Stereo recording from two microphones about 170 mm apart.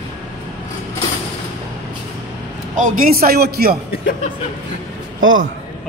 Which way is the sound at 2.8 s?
50° right (ahead or behind).